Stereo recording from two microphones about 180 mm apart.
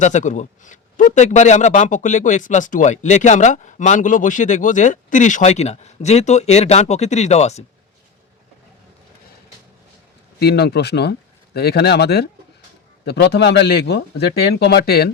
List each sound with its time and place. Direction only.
0.0 s a man's voice: 45° left (ahead or behind)
10.4 s speech: 65° left (ahead or behind)